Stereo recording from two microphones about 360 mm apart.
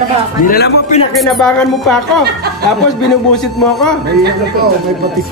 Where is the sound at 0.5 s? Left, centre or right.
Left.